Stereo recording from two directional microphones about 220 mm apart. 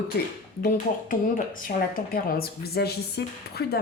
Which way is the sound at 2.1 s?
45° left (ahead or behind).